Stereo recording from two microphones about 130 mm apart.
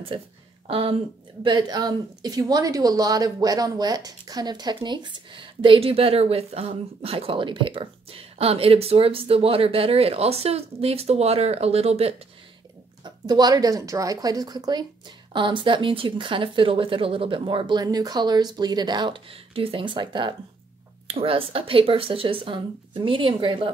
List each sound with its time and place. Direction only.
0.1 s a woman's voice: 45° right (ahead or behind)
1.4 s a woman's voice: 35° right (ahead or behind); by 12.2 s 50° right (ahead or behind)
13.0 s a woman's voice: 30° right (ahead or behind)